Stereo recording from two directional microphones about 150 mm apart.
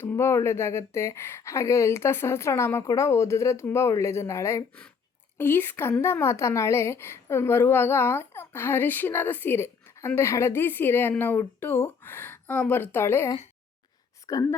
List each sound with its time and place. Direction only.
0.0 s a woman's voice: 15° left (ahead or behind)